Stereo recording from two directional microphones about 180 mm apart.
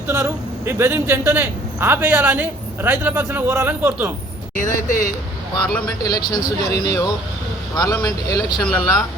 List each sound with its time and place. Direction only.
0.1 s a man's voice: 15° right (ahead or behind)
4.5 s speech: 45° left (ahead or behind)
5.6 s speech: 5° left (ahead or behind)
6.0 s speech: 20° left (ahead or behind)
8.6 s speech: 5° left (ahead or behind)